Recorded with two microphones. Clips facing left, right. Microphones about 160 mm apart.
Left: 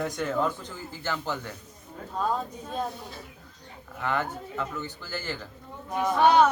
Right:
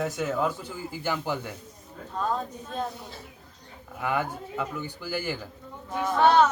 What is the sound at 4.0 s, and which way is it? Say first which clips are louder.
Speech: right 1 dB; 10° right (ahead or behind).